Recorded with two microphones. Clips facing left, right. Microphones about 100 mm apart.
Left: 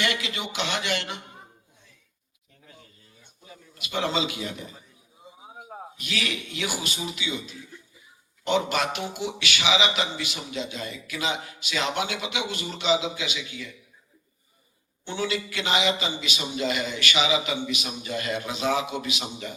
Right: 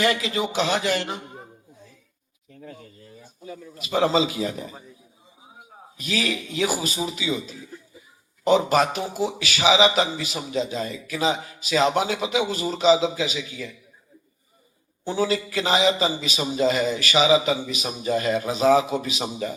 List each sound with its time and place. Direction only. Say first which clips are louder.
0.0 s a man's voice: right 6 dB; 35° right (ahead or behind)
3.5 s a man's voice: right 6 dB; 35° right (ahead or behind)
6.0 s a man's voice: right 6 dB; 35° right (ahead or behind)
15.0 s a man's voice: right 5 dB; 35° right (ahead or behind)